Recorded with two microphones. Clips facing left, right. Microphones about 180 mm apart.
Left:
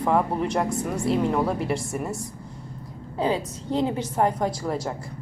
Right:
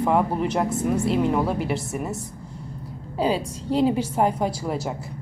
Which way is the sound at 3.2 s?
10° right (ahead or behind).